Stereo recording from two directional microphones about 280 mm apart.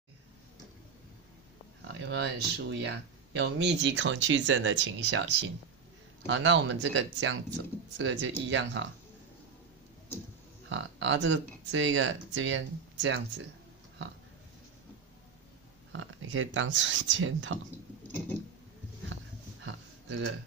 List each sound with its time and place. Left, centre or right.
1.9 s speech: right
10.7 s speech: right
15.9 s speech: right
19.6 s a sound: right